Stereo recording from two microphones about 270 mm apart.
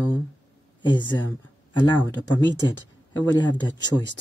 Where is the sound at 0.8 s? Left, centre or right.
Centre.